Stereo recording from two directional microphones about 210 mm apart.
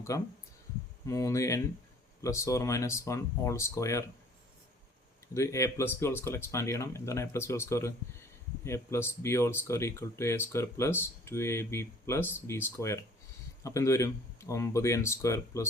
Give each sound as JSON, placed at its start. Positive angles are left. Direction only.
{"t": 0.1, "sound": "speech", "side_deg": 15}
{"t": 5.3, "sound": "speech", "side_deg": 15}